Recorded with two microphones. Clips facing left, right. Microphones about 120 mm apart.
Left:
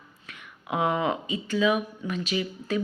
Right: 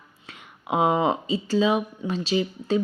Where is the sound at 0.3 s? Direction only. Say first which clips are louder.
Right 4 dB; 25° right (ahead or behind).